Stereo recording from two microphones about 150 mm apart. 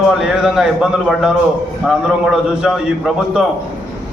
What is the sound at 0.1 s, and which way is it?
A man's voice, 5° right (ahead or behind).